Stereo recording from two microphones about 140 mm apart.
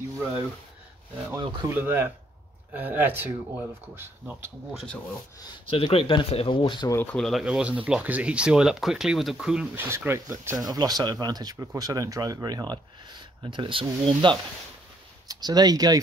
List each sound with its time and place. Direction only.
1.7 s speech: 15° right (ahead or behind)
5.7 s speech: 40° left (ahead or behind)
6.9 s speech: 15° left (ahead or behind)
7.2 s speech: centre (ahead or behind)
9.8 s speech: 20° right (ahead or behind)